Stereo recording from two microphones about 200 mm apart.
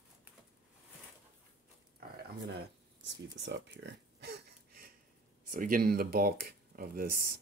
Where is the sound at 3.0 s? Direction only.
60° right (ahead or behind).